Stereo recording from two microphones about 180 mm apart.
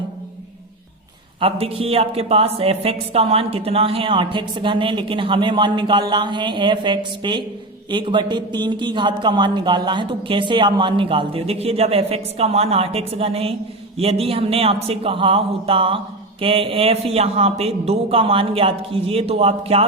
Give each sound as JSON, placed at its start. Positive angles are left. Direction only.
{"t": 1.4, "sound": "a woman's voice", "side_deg": -30}